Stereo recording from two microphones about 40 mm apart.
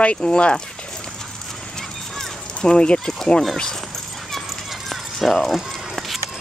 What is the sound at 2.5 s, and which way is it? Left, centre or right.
Speech, left.